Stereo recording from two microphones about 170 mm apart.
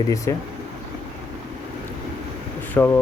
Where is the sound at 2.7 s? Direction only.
10° left (ahead or behind).